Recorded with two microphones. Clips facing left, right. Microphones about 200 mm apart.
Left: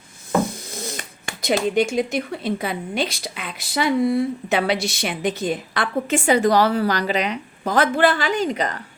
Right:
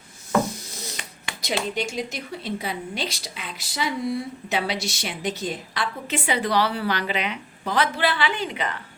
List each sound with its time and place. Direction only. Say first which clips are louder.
0.7 s speech: left 6 dB; 50° left (ahead or behind)